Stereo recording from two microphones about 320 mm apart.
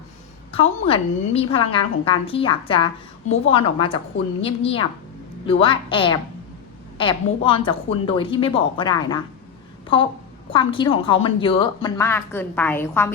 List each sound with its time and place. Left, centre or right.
0.9 s a woman's voice: centre
10.5 s a woman's voice: centre